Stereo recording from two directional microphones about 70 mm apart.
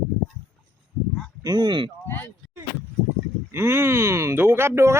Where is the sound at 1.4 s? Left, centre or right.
Right.